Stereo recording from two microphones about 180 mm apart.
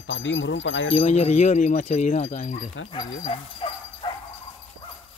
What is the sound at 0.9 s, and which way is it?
Speech, 35° left (ahead or behind).